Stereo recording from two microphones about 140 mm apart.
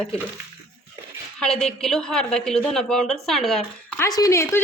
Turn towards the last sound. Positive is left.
turn(degrees=20)  # may be behind; listen again after turning